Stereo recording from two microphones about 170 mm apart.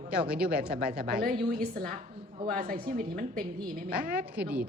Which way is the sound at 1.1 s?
60° right (ahead or behind).